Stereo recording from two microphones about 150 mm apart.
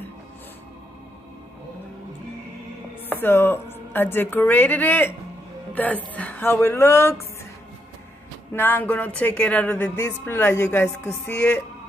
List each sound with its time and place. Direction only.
3.2 s speech: 15° left (ahead or behind)
6.1 s speech: 10° left (ahead or behind)
8.5 s speech: 10° left (ahead or behind)